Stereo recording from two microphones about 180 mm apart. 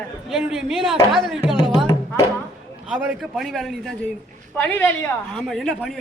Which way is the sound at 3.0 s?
Centre (ahead or behind).